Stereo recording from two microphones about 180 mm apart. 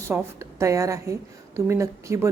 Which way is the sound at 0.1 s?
15° right (ahead or behind).